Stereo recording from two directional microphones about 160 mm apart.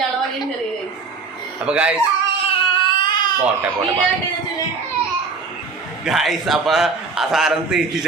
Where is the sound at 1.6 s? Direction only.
5° right (ahead or behind).